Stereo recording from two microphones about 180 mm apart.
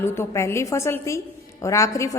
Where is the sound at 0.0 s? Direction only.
15° left (ahead or behind).